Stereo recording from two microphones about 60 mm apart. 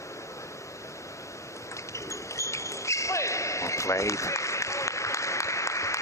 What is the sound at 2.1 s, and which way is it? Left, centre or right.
Basketball bounce, left.